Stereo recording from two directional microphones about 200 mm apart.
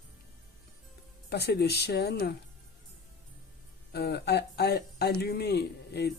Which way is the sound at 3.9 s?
55° left (ahead or behind).